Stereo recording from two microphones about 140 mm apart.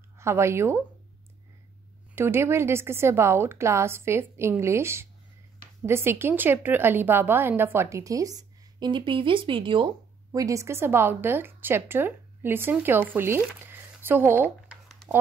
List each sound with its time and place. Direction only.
0.2 s speech: 20° right (ahead or behind)
2.1 s a woman's voice: 15° right (ahead or behind); by 9.9 s 35° right (ahead or behind)
10.3 s a woman's voice: 25° right (ahead or behind)